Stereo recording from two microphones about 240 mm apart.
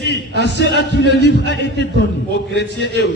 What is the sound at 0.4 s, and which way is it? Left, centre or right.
A man's voice, left.